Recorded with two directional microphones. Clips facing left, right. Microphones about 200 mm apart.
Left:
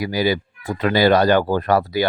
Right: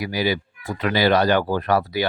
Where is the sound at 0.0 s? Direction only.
45° left (ahead or behind).